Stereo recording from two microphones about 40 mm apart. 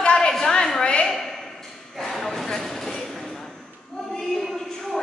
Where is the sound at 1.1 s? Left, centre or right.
Centre.